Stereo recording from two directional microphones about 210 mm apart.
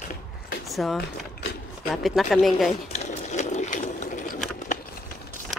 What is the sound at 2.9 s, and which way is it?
Sewing machine, 35° left (ahead or behind).